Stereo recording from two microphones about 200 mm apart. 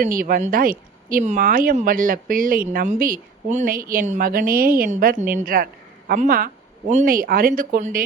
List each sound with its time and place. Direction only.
0.0 s speech: 45° right (ahead or behind)